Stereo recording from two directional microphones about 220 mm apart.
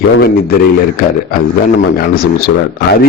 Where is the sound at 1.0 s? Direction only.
40° left (ahead or behind).